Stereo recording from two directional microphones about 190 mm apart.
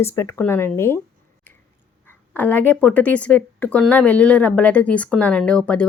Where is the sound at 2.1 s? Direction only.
10° left (ahead or behind).